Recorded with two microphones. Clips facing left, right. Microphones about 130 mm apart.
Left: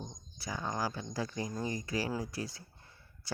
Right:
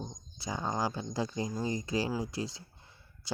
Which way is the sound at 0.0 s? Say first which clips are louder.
Right 3 dB; 25° right (ahead or behind).